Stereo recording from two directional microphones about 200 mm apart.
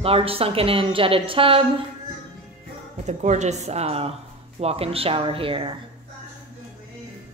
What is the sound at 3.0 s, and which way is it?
A woman's voice, 35° right (ahead or behind).